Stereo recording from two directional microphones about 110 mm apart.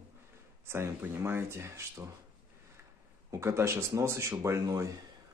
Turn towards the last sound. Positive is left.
turn(degrees=-30)  # may be behind; listen again after turning